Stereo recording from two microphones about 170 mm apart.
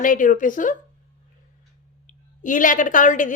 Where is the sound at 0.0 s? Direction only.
50° left (ahead or behind).